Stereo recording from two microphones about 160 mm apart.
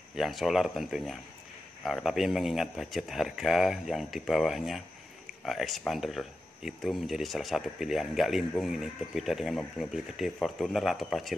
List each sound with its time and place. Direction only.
0.1 s speech: centre (ahead or behind)